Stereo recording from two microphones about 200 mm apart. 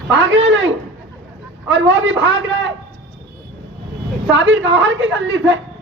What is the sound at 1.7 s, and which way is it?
Speech, 65° right (ahead or behind).